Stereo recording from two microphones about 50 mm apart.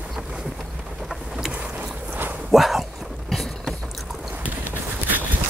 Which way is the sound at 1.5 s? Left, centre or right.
Right.